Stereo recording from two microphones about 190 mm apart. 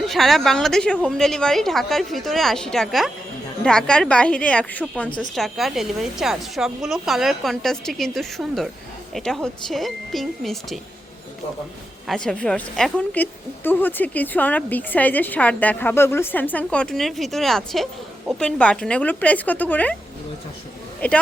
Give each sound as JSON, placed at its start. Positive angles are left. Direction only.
{"t": 0.0, "sound": "a woman's voice", "side_deg": 0}
{"t": 12.0, "sound": "a woman's voice", "side_deg": 5}
{"t": 21.0, "sound": "a woman's voice", "side_deg": 5}